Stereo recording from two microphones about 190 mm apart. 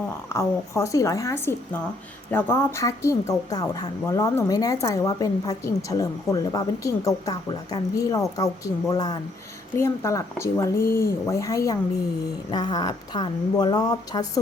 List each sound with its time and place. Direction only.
0.3 s speech: 15° left (ahead or behind)